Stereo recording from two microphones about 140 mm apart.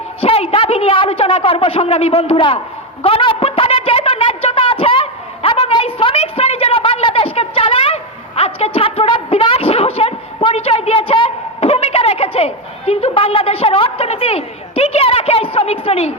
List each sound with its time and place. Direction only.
0.2 s a woman's voice: 45° left (ahead or behind)
3.0 s a sound: 40° left (ahead or behind)
8.4 s a woman's voice: 45° left (ahead or behind)